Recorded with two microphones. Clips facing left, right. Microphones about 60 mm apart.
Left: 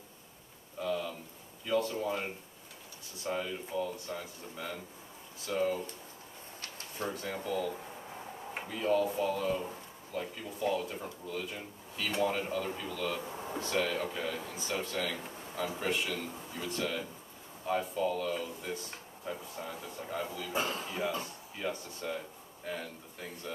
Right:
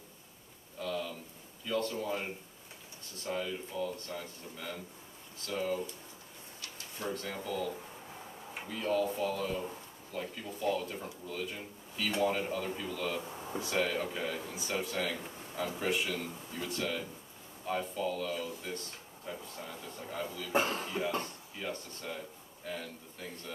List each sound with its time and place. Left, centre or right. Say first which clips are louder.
0.7 s a sound: left 2 dB; centre
1.7 s speech: left 2 dB; centre
7.1 s speech: even; centre
13.3 s a sound: left 1 dB; centre
13.6 s speech: even; centre
20.5 s speech: right 4 dB; right
20.8 s speech: right 1 dB; centre